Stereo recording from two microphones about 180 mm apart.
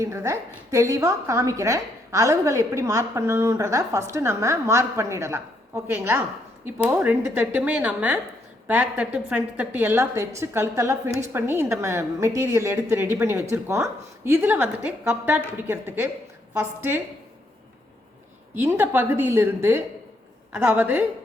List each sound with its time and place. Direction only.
0.0 s a woman's voice: 15° right (ahead or behind)
18.6 s a woman's voice: 10° right (ahead or behind)